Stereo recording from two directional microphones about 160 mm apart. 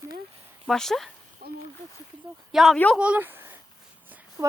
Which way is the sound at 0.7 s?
Centre (ahead or behind).